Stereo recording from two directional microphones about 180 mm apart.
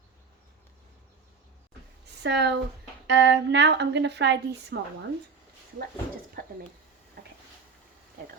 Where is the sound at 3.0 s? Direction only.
85° right; by 4.7 s 70° right (ahead or behind).